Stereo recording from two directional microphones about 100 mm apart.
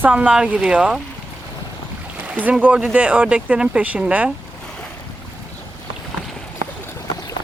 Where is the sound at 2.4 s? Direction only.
15° right (ahead or behind).